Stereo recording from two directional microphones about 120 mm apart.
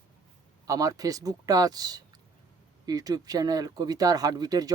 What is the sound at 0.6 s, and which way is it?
Speech, 30° right (ahead or behind).